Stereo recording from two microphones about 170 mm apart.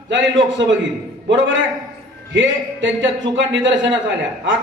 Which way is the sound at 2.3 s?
90° right.